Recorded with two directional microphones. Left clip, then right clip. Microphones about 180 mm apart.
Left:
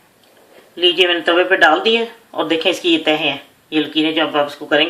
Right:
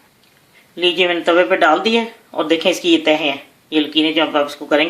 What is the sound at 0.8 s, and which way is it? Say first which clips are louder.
Speech: left 2 dB; 50° right (ahead or behind).